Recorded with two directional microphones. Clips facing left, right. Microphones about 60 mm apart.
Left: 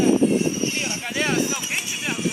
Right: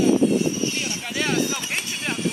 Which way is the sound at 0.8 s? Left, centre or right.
Left.